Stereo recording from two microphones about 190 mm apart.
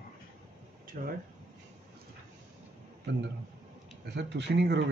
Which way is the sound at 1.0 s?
45° right (ahead or behind).